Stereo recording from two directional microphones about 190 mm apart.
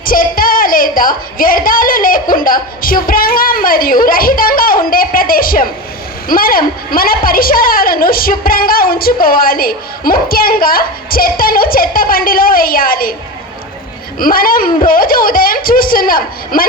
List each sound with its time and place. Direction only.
0.0 s a woman's voice: 50° left (ahead or behind)
14.2 s a woman's voice: 50° left (ahead or behind)